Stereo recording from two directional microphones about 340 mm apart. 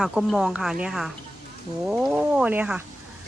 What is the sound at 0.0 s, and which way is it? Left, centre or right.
Speech, centre.